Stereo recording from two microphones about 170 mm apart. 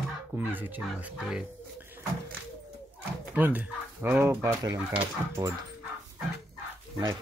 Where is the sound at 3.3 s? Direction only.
10° right (ahead or behind).